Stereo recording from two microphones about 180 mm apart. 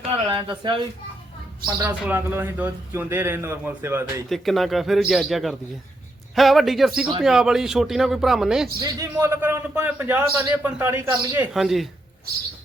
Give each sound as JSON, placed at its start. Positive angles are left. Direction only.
{"t": 0.3, "sound": "speech", "side_deg": -25}
{"t": 1.6, "sound": "speech", "side_deg": -15}
{"t": 4.3, "sound": "a man's voice", "side_deg": 0}
{"t": 8.8, "sound": "speech", "side_deg": -20}
{"t": 11.5, "sound": "a man's voice", "side_deg": 0}